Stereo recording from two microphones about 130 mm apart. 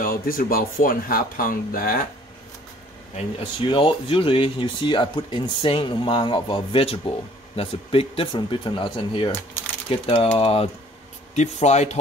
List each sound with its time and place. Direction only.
0.0 s speech: 90° left
3.2 s speech: 40° left (ahead or behind)
11.3 s speech: 60° left (ahead or behind)